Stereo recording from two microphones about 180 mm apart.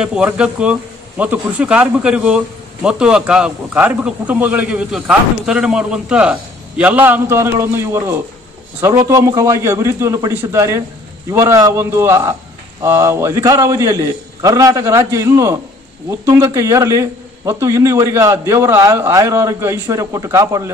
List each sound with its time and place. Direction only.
0.0 s a man's voice: 5° right (ahead or behind)